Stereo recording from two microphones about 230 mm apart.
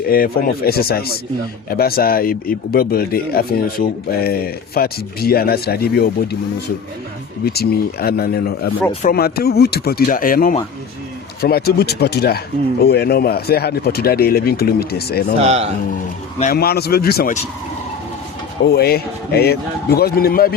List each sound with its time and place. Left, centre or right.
0.1 s speech: left
7.4 s speech: left
8.9 s speech: left
9.1 s speech: left
15.4 s speech: right
16.4 s speech: left
18.6 s speech: left